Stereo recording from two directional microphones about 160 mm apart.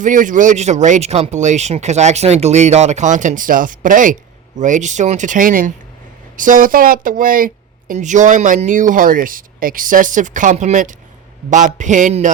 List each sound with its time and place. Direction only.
0.0 s speech: 55° right (ahead or behind)